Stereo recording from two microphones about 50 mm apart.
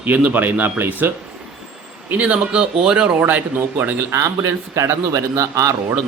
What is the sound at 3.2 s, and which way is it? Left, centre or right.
Speech, right.